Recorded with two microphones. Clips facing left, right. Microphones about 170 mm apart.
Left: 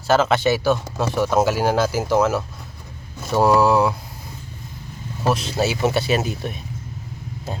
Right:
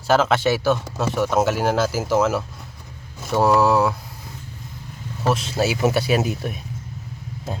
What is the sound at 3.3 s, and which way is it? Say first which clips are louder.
Speech: left 1 dB; centre (ahead or behind).